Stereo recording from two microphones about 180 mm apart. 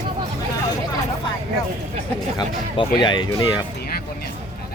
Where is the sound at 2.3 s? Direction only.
25° left (ahead or behind).